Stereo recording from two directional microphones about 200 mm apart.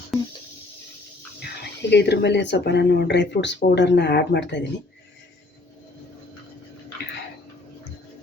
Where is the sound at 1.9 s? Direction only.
60° left (ahead or behind).